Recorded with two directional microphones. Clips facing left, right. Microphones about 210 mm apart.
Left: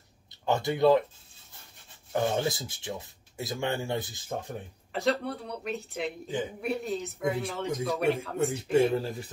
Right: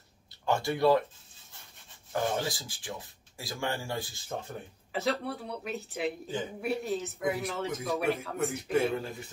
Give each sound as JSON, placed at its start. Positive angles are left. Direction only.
{"t": 0.5, "sound": "speech", "side_deg": 20}
{"t": 2.1, "sound": "speech", "side_deg": 25}
{"t": 4.9, "sound": "speech", "side_deg": 0}
{"t": 8.7, "sound": "speech", "side_deg": 30}